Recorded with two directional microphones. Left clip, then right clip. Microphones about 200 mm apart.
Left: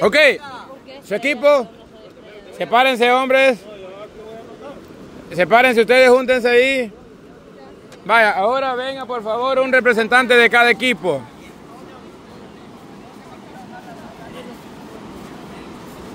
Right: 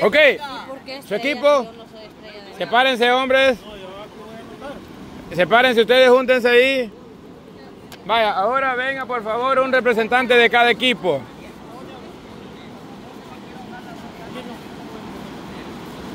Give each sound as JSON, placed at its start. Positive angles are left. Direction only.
{"t": 0.0, "sound": "speech", "side_deg": 25}
{"t": 0.4, "sound": "a sound", "side_deg": -25}
{"t": 1.0, "sound": "speech", "side_deg": 25}
{"t": 5.3, "sound": "speech", "side_deg": 25}
{"t": 8.1, "sound": "speech", "side_deg": 40}
{"t": 8.6, "sound": "speech", "side_deg": 10}
{"t": 9.1, "sound": "speech", "side_deg": 25}